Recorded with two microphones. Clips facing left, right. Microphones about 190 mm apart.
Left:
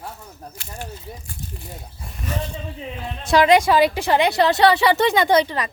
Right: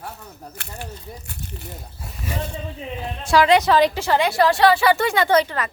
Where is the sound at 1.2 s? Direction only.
70° right (ahead or behind).